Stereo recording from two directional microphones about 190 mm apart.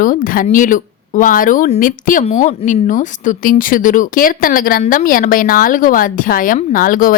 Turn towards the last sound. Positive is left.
turn(degrees=45)  # may be behind; listen again after turning